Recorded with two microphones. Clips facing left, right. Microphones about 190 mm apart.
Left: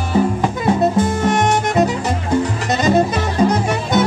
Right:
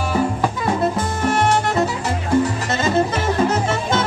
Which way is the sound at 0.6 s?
20° left (ahead or behind).